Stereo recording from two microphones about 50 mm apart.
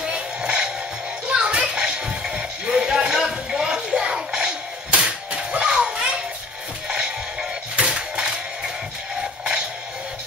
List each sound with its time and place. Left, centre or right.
0.0 s music: centre
7.8 s music: centre